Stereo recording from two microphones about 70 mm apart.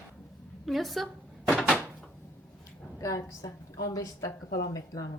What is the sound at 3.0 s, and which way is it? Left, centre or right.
A woman's voice, left.